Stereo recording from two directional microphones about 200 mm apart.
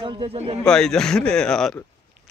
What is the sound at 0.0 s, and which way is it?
Speech, 25° right (ahead or behind).